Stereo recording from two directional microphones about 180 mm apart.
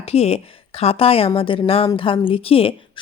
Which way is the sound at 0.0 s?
35° left (ahead or behind).